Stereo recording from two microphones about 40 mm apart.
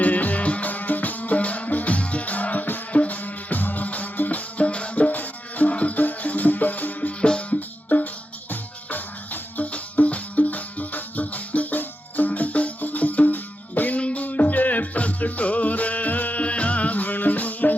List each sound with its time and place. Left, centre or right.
0.0 s music: left
5.0 s music: left
7.2 s music: left
7.9 s music: left